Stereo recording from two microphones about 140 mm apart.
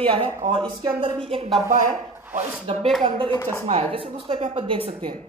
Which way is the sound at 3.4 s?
15° left (ahead or behind).